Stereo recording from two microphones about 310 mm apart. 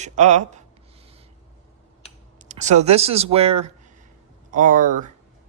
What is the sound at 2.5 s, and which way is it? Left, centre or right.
Speech, right.